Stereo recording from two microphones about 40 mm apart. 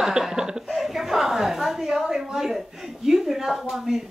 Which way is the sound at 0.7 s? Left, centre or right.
Centre.